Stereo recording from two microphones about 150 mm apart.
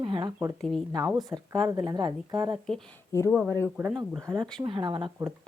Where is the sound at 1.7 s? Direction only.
25° right (ahead or behind).